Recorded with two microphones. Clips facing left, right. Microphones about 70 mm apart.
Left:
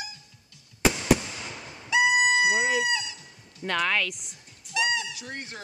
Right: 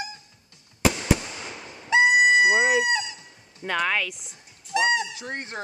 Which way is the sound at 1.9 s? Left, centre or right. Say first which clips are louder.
Right 4 dB; right.